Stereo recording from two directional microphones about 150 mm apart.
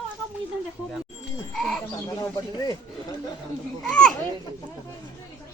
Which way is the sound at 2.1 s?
20° left (ahead or behind).